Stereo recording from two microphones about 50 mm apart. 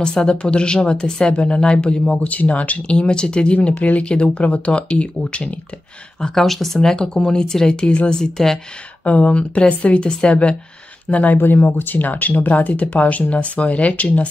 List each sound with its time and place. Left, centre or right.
0.0 s speech: centre
6.2 s speech: centre
9.0 s speech: left
11.3 s speech: left